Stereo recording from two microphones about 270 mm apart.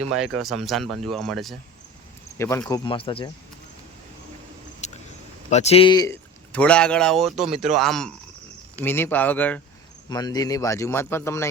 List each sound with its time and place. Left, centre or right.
0.1 s a man's voice: centre
5.5 s a man's voice: left